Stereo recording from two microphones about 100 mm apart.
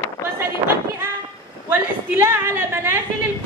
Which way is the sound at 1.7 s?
20° right (ahead or behind).